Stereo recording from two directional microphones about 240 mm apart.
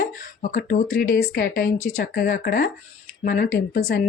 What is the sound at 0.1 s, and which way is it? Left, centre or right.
Speech, left.